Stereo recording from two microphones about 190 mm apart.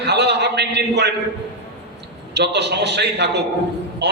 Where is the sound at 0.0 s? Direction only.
60° right (ahead or behind).